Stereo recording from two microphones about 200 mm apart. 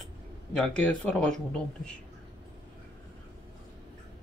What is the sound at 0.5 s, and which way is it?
Speech, 5° left (ahead or behind).